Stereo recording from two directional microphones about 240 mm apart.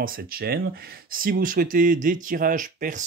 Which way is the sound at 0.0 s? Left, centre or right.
Right.